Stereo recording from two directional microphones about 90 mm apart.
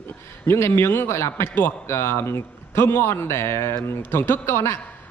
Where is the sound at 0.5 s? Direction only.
30° left (ahead or behind).